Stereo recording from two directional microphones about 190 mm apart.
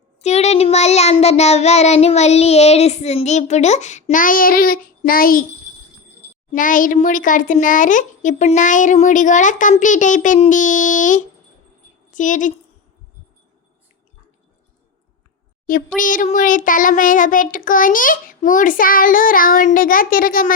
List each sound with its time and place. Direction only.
0.2 s child singing: 35° left (ahead or behind)
6.5 s child singing: 45° left (ahead or behind)
16.0 s child singing: 45° left (ahead or behind)